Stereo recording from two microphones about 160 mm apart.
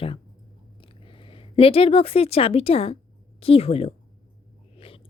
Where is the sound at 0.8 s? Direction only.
35° left (ahead or behind).